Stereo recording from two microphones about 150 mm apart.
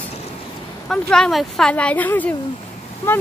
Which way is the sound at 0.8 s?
5° left (ahead or behind).